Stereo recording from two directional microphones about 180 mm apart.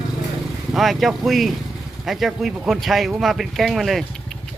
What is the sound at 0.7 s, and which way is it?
Speech, centre (ahead or behind).